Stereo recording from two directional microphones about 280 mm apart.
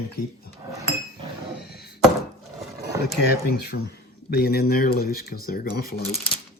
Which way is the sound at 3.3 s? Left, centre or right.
Left.